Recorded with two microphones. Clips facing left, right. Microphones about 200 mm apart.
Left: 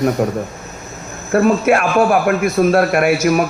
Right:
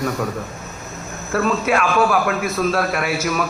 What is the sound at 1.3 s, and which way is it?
A man's voice, 50° left (ahead or behind).